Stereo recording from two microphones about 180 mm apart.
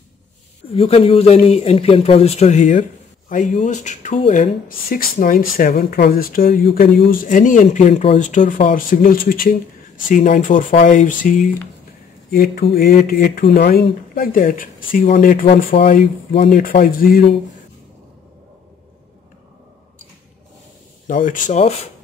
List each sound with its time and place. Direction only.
0.7 s a man's voice: 35° left (ahead or behind); by 15.4 s 50° left (ahead or behind)
16.4 s speech: 50° left (ahead or behind)
21.1 s speech: 45° left (ahead or behind)